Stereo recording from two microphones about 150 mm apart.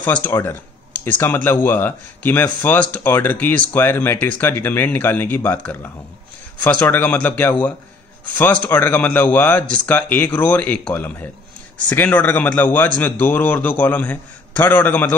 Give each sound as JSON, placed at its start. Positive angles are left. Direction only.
{"t": 0.0, "sound": "speech", "side_deg": 10}